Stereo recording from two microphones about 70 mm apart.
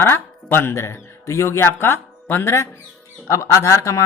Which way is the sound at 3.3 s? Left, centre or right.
Left.